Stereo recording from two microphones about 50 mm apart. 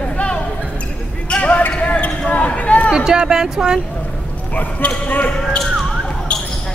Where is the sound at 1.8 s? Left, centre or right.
Left.